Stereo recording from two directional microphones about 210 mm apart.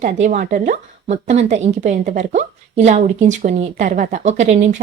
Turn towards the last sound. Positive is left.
turn(degrees=-35)  # may be behind; listen again after turning